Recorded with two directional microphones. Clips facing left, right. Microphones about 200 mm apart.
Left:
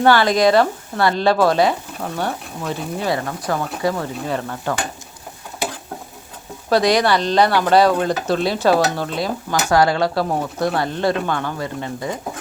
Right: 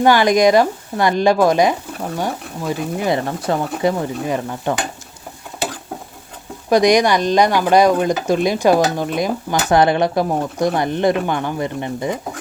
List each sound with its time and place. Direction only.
0.0 s speech: 15° right (ahead or behind)
3.2 s speech: 25° right (ahead or behind)
6.7 s speech: 15° right (ahead or behind)